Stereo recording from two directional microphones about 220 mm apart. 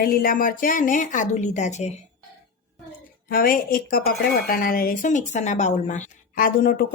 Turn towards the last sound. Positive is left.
turn(degrees=40)  # may be behind; listen again after turning